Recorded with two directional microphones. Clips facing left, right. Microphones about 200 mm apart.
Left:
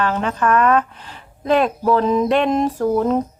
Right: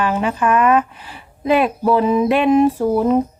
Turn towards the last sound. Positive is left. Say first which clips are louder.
# right 2 dB
turn(degrees=-10)  # may be behind; listen again after turning